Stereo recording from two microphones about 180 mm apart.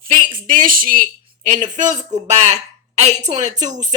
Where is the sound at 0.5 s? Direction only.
50° right (ahead or behind).